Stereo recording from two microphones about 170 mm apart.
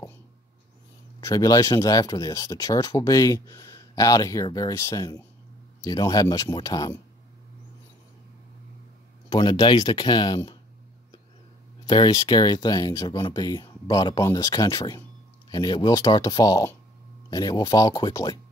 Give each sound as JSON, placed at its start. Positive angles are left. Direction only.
{"t": 1.2, "sound": "speech", "side_deg": 20}
{"t": 9.3, "sound": "speech", "side_deg": 25}
{"t": 11.8, "sound": "speech", "side_deg": 25}